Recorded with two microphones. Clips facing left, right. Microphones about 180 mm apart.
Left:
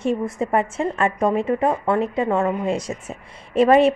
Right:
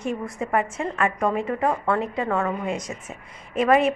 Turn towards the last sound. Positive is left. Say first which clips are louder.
# left 5 dB
turn(degrees=30)  # may be behind; listen again after turning